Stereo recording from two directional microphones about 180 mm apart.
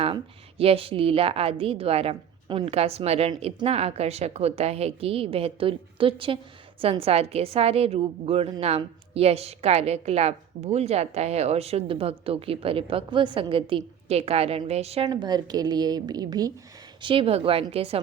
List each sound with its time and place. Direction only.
0.6 s a woman's voice: 30° right (ahead or behind)